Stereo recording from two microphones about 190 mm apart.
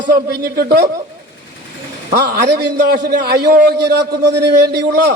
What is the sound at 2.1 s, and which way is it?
A man's voice, 60° right (ahead or behind).